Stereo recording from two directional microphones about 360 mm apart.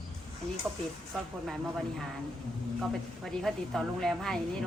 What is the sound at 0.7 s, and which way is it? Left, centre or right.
Speech, centre.